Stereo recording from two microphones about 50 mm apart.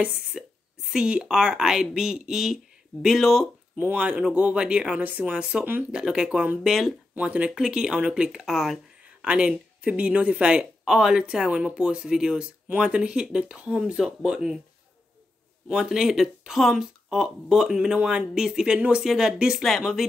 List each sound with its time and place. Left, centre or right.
0.3 s a woman's voice: centre
3.7 s speech: right
4.0 s speech: right; by 6.9 s centre
7.2 s speech: right
9.2 s speech: right
13.9 s speech: centre
15.7 s speech: centre
17.9 s speech: right
18.3 s speech: centre
18.8 s speech: right; by 20.1 s centre